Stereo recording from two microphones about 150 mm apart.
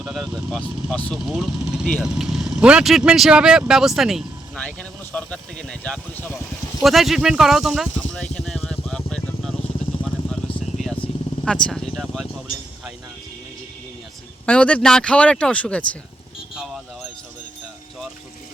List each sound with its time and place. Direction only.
0.0 s speech: centre (ahead or behind)
1.2 s speech: 5° right (ahead or behind)
6.8 s speech: centre (ahead or behind)
11.0 s vehicle: 40° left (ahead or behind)
11.4 s speech: 5° left (ahead or behind)
14.4 s speech: 10° left (ahead or behind)